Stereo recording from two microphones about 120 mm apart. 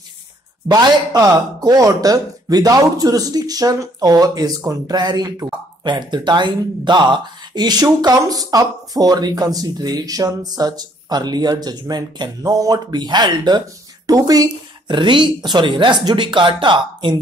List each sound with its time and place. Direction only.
0.7 s speech: 35° right (ahead or behind)